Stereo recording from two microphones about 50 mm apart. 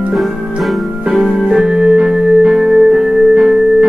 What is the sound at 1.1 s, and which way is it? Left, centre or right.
Keyboard, centre.